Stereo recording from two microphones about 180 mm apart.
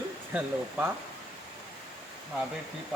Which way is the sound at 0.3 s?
10° right (ahead or behind).